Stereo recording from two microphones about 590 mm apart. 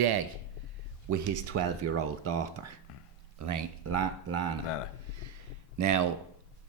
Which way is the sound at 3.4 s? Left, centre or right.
Right.